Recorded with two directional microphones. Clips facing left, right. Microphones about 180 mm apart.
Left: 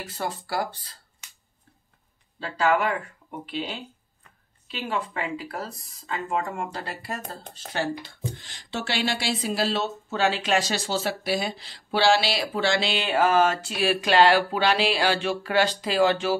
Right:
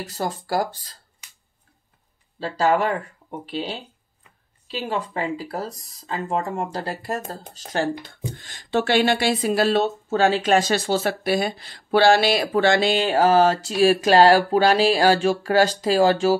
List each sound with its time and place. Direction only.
0.0 s speech: 40° right (ahead or behind)
2.4 s speech: 35° right (ahead or behind)